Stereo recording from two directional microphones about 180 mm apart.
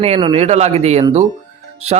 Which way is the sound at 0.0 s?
35° right (ahead or behind).